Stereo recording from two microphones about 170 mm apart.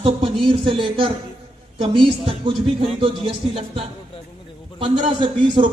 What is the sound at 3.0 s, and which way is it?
A man's voice, 30° right (ahead or behind).